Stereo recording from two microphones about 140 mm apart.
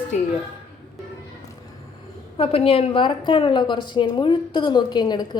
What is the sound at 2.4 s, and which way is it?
A woman's voice, 45° left (ahead or behind).